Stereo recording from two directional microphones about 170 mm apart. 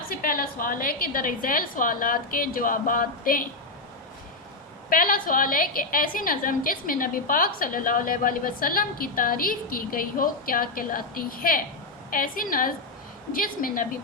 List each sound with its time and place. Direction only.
0.1 s a woman's voice: 55° left (ahead or behind)
4.9 s a woman's voice: 55° left (ahead or behind)